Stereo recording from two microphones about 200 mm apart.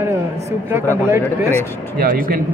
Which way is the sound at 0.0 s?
15° right (ahead or behind).